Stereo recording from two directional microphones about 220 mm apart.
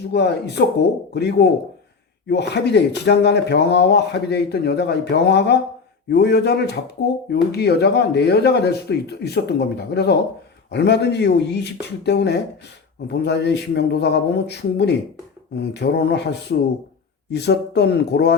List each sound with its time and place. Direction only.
0.1 s speech: 50° left (ahead or behind)